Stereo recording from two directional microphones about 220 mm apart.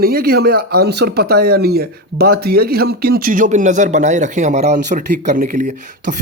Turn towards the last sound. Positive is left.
turn(degrees=-35)  # may be behind; listen again after turning